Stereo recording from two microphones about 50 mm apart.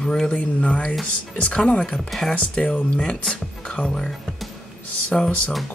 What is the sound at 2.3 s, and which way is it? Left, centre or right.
Speech, left.